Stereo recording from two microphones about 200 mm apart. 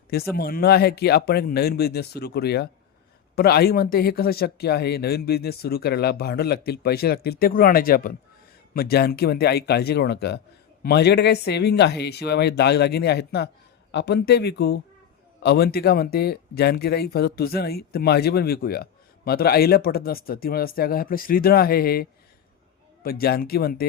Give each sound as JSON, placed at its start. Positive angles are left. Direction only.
{"t": 0.3, "sound": "speech", "side_deg": 50}
{"t": 23.0, "sound": "speech", "side_deg": 50}